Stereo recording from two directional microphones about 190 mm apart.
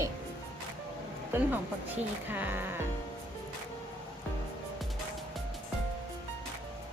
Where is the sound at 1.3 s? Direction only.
10° right (ahead or behind).